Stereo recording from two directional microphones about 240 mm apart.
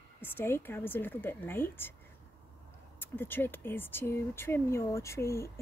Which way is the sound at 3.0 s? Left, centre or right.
Centre.